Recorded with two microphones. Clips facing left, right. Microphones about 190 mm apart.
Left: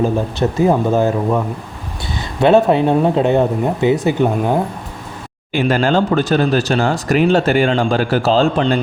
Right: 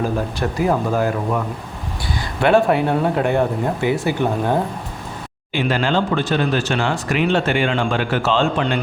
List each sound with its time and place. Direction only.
0.0 s speech: 25° left (ahead or behind)
2.4 s speech: 20° left (ahead or behind)
5.5 s speech: 45° left (ahead or behind)